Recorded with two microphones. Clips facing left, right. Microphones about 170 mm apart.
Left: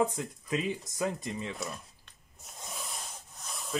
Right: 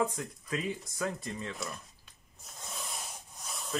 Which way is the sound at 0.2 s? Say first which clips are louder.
Left 3 dB; 20° left (ahead or behind).